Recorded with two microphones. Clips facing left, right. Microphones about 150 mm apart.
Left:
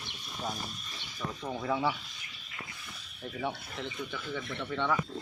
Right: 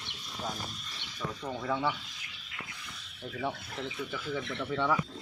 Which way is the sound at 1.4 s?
5° left (ahead or behind).